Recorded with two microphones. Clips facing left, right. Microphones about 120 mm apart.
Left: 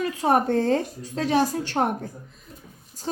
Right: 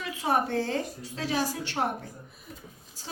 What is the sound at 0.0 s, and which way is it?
A woman's voice, 45° left (ahead or behind).